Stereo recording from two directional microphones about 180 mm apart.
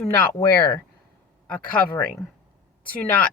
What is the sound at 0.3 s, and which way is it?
Speech, 15° left (ahead or behind).